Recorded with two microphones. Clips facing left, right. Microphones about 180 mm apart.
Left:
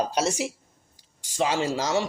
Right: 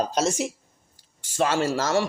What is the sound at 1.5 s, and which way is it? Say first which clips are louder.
Speech: right 1 dB; 15° left (ahead or behind).